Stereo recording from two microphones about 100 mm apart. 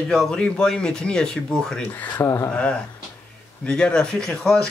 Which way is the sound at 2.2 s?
30° left (ahead or behind).